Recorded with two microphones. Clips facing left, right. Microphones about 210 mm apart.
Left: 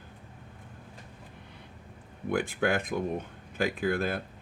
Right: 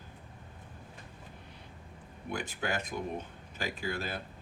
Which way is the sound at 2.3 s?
55° left (ahead or behind).